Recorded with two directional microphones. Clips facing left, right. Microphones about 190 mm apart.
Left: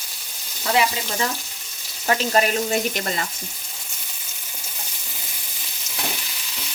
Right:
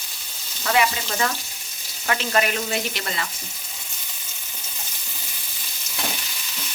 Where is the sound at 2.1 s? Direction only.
35° left (ahead or behind).